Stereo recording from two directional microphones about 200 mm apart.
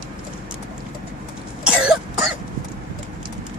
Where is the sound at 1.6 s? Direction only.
5° right (ahead or behind).